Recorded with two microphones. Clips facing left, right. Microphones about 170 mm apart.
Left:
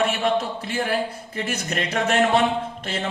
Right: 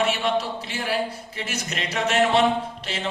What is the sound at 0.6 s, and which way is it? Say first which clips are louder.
A man's voice: left 2 dB; 55° left (ahead or behind).